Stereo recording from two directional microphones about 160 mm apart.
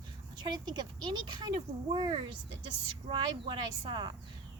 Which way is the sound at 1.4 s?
25° right (ahead or behind).